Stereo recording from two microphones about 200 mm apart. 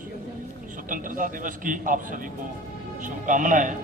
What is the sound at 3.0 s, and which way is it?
Speech, 40° right (ahead or behind).